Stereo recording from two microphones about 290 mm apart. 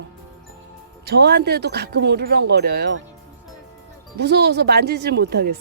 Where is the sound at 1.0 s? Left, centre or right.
Right.